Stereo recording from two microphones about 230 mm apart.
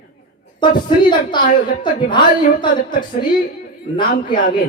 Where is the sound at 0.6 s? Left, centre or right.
Centre.